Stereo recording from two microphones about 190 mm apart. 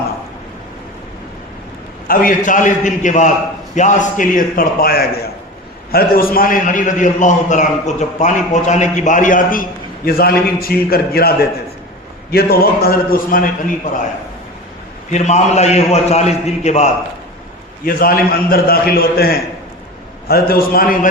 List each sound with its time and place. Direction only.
2.0 s a man's voice: 45° left (ahead or behind)
15.1 s a man's voice: 35° left (ahead or behind)
17.8 s a man's voice: 50° left (ahead or behind)